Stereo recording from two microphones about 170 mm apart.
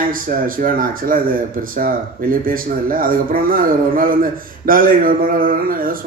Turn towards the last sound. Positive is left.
turn(degrees=-55)  # may be behind; listen again after turning